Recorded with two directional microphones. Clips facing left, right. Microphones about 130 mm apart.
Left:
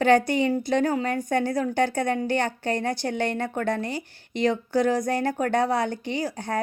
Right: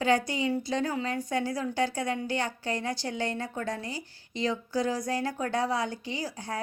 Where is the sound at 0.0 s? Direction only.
60° left (ahead or behind).